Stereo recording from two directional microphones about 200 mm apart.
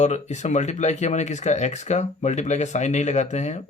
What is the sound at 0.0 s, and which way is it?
Speech, 35° left (ahead or behind).